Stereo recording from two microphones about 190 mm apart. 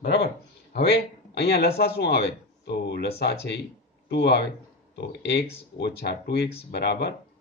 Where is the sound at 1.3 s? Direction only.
60° left (ahead or behind).